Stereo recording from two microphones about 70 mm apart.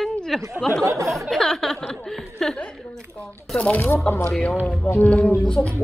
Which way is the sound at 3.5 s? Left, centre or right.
Left.